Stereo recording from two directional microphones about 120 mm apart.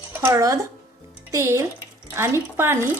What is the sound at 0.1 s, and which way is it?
A woman's voice, 25° right (ahead or behind).